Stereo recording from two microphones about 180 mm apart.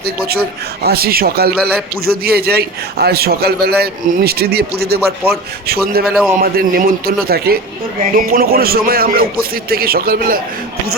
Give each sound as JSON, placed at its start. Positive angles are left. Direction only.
{"t": 0.8, "sound": "a man's voice", "side_deg": -60}